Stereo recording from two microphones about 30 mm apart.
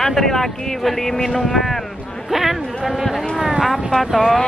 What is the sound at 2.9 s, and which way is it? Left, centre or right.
Speech, centre.